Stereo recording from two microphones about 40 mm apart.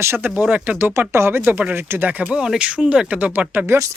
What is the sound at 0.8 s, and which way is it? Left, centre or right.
Speech, right.